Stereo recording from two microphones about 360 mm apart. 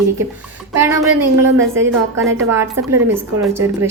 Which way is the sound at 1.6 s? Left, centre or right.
Right.